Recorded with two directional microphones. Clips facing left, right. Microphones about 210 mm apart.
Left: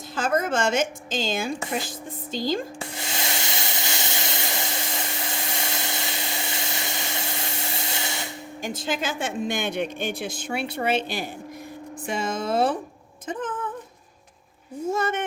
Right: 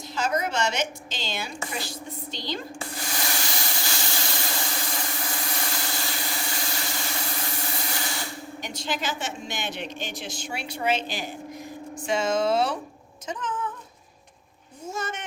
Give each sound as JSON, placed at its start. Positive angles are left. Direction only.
{"t": 0.2, "sound": "a woman's voice", "side_deg": 50}
{"t": 2.9, "sound": "a sound", "side_deg": 25}
{"t": 8.6, "sound": "a woman's voice", "side_deg": 50}
{"t": 14.8, "sound": "speech", "side_deg": 60}